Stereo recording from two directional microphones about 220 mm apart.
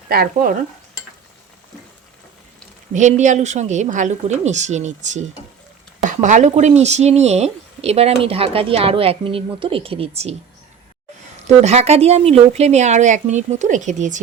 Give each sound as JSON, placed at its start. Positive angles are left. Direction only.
{"t": 0.1, "sound": "speech", "side_deg": -40}
{"t": 2.9, "sound": "speech", "side_deg": -35}
{"t": 6.2, "sound": "speech", "side_deg": -35}
{"t": 11.4, "sound": "speech", "side_deg": -30}